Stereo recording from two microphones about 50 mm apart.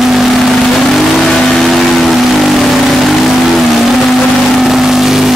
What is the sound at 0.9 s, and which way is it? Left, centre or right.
Vehicle, centre.